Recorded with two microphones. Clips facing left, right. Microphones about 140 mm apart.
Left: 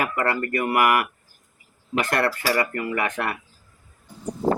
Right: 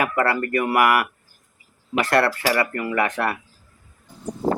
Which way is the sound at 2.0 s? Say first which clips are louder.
Right 4 dB; 20° left (ahead or behind).